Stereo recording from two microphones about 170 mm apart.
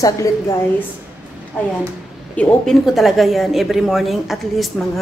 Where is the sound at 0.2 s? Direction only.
20° left (ahead or behind).